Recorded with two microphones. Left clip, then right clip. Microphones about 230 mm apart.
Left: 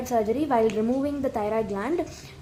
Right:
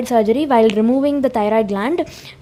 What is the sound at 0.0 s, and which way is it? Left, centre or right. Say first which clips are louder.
A woman's voice: right 9 dB; right.